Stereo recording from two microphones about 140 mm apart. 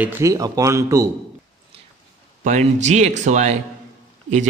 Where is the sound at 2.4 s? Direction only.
55° right (ahead or behind).